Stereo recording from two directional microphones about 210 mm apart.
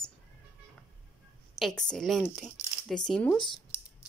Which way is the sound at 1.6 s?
5° left (ahead or behind).